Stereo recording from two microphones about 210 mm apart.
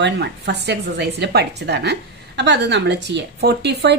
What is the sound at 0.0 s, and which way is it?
A woman's voice, 55° right (ahead or behind).